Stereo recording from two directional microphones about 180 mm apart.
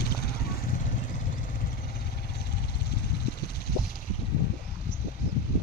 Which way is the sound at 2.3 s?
65° left (ahead or behind).